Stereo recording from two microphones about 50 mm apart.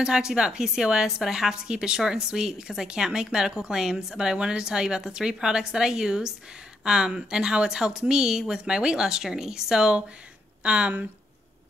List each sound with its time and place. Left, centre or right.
0.0 s a woman's voice: centre